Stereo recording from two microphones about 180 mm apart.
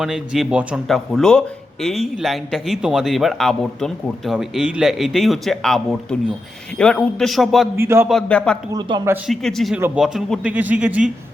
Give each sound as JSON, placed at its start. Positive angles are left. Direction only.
{"t": 0.0, "sound": "speech", "side_deg": -5}
{"t": 7.8, "sound": "a man's voice", "side_deg": -15}
{"t": 8.1, "sound": "speech", "side_deg": 5}
{"t": 8.7, "sound": "a man's voice", "side_deg": -20}
{"t": 9.2, "sound": "a man's voice", "side_deg": 0}